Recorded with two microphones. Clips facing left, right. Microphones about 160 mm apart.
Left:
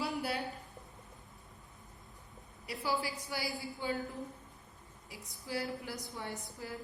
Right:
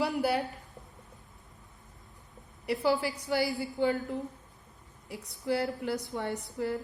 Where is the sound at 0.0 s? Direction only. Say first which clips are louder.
Right 8 dB; 75° right (ahead or behind).